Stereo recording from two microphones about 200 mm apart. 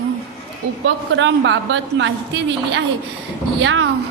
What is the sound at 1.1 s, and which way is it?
Speech, 70° right (ahead or behind).